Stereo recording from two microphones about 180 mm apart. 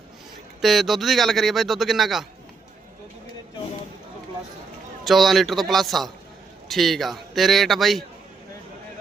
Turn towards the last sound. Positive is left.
turn(degrees=0)  # may be behind; listen again after turning